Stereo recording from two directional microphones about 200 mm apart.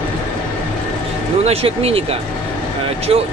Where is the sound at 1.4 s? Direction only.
30° right (ahead or behind).